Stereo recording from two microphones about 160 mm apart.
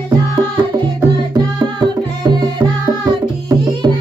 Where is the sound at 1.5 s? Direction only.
25° right (ahead or behind).